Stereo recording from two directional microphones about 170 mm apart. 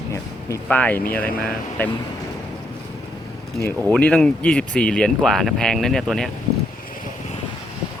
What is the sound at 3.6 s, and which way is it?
Speech, 10° left (ahead or behind).